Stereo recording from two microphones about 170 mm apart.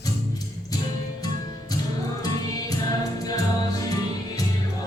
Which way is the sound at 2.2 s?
20° left (ahead or behind).